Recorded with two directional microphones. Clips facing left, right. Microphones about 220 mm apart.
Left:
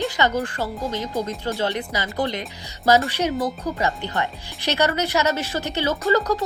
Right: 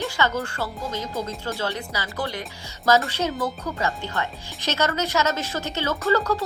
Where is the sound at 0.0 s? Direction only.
15° left (ahead or behind).